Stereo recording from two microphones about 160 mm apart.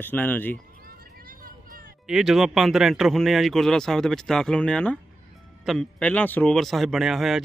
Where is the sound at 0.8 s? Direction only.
65° right (ahead or behind).